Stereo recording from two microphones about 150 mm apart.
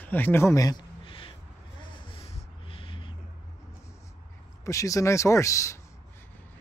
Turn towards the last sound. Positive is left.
turn(degrees=20)  # may be behind; listen again after turning